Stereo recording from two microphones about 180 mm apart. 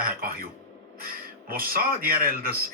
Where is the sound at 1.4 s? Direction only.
55° right (ahead or behind).